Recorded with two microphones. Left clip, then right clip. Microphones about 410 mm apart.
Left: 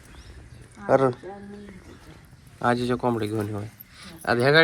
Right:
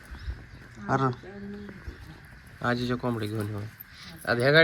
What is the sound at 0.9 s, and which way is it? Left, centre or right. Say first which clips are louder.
Speech: left 7 dB; centre.